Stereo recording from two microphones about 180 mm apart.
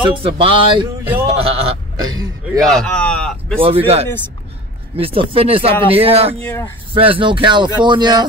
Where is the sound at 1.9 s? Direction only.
20° right (ahead or behind).